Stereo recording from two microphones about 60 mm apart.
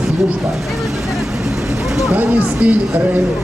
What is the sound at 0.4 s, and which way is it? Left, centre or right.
Vehicle, centre.